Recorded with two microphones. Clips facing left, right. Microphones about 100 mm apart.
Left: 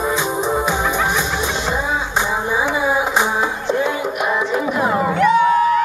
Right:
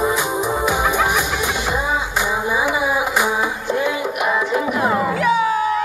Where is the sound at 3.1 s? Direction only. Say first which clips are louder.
Left 1 dB; 20° left (ahead or behind).